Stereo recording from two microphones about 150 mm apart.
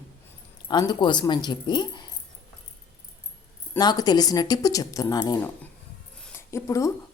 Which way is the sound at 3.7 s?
25° left (ahead or behind).